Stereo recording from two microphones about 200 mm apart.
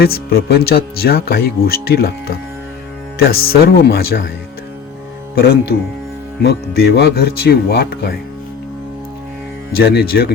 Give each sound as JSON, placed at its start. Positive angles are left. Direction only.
{"t": 0.0, "sound": "speech", "side_deg": 50}
{"t": 5.3, "sound": "speech", "side_deg": 50}
{"t": 9.7, "sound": "speech", "side_deg": 50}